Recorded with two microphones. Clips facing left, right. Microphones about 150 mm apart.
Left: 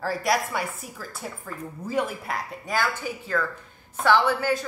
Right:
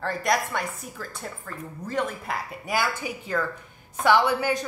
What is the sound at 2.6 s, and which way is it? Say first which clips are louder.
A woman's voice: even; 10° right (ahead or behind).